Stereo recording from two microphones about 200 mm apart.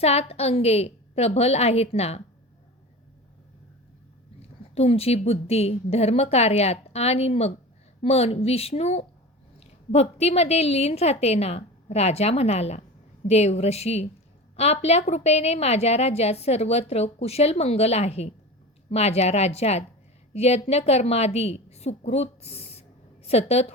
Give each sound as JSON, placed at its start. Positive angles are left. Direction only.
{"t": 0.0, "sound": "a woman's voice", "side_deg": 30}
{"t": 4.7, "sound": "a woman's voice", "side_deg": 30}